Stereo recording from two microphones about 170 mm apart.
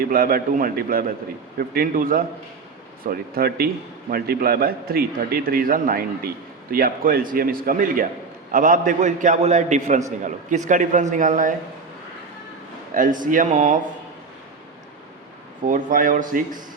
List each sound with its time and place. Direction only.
0.0 s a man's voice: 60° right (ahead or behind)
12.9 s a man's voice: 50° right (ahead or behind)
15.6 s a man's voice: 50° right (ahead or behind)